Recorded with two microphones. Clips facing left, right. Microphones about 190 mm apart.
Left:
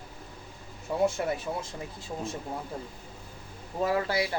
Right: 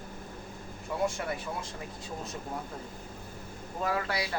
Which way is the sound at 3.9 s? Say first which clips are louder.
Left 4 dB; 30° left (ahead or behind).